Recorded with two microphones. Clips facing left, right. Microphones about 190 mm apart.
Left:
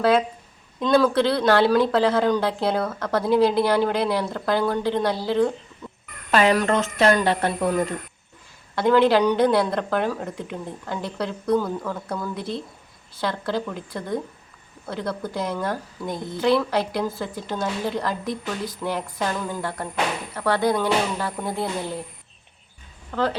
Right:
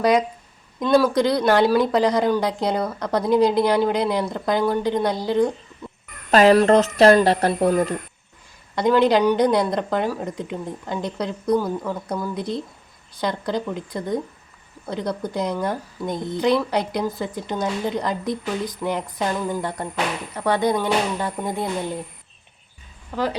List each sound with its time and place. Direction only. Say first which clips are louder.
0.0 s a woman's voice: right 1 dB; 15° right (ahead or behind)
6.3 s speech: right 5 dB; 35° right (ahead or behind)
8.7 s a woman's voice: even; 15° right (ahead or behind)
23.1 s a woman's voice: even; 15° right (ahead or behind)